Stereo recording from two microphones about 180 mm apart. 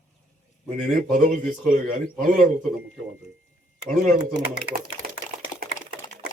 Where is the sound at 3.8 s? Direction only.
45° right (ahead or behind).